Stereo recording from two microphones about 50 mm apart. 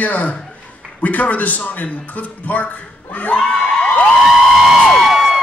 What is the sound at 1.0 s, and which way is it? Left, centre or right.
A man's voice, left.